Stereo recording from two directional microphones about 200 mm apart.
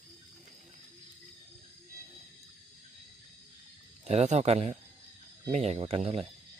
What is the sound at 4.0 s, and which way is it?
A man's voice, 35° right (ahead or behind).